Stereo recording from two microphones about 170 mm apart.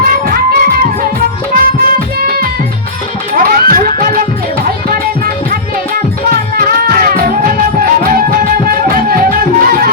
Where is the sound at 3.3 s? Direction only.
60° right (ahead or behind).